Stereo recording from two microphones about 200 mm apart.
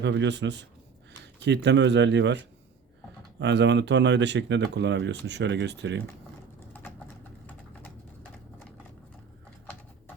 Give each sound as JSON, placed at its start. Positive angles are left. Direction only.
{"t": 0.0, "sound": "speech", "side_deg": -60}
{"t": 7.4, "sound": "typing", "side_deg": 10}